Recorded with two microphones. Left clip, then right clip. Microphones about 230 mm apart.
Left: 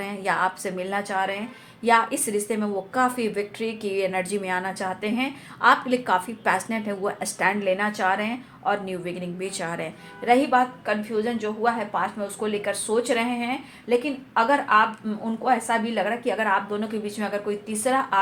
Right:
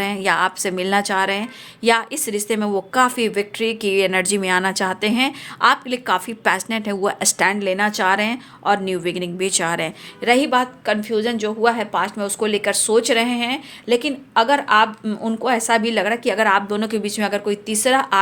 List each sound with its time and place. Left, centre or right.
0.0 s a woman's voice: right